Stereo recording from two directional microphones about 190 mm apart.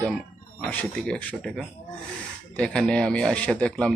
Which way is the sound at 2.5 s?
5° left (ahead or behind).